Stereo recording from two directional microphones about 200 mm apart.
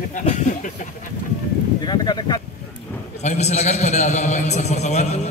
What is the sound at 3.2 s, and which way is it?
A man's voice, 35° left (ahead or behind).